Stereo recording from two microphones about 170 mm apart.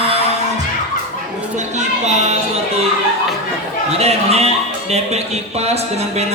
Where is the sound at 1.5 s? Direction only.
40° right (ahead or behind).